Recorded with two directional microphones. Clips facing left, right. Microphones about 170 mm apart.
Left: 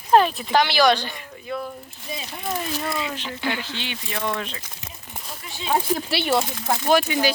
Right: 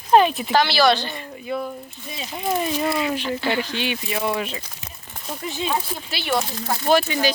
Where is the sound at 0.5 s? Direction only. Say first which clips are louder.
Even; 15° left (ahead or behind).